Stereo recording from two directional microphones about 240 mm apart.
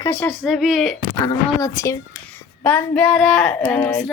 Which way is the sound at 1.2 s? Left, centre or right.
Centre.